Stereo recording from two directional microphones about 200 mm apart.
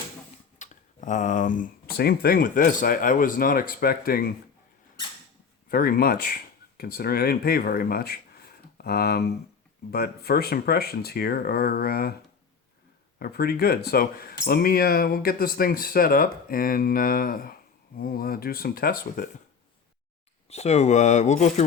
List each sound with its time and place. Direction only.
0.6 s speech: 40° left (ahead or behind)
5.6 s speech: 45° left (ahead or behind)
13.1 s speech: 50° left (ahead or behind)
20.5 s speech: 35° left (ahead or behind)